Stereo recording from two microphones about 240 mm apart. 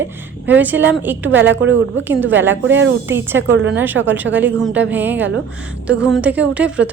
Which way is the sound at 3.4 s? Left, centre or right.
Right.